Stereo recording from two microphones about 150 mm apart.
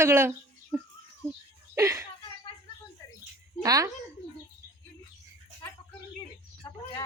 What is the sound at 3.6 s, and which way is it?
Speech, 25° right (ahead or behind).